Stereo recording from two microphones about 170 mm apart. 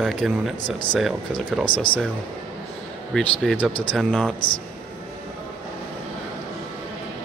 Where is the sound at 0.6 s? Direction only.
25° left (ahead or behind).